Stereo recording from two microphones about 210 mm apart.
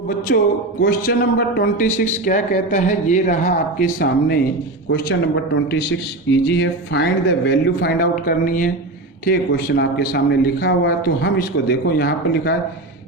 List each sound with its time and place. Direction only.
0.3 s a man's voice: 50° left (ahead or behind)
4.9 s a man's voice: 60° left (ahead or behind)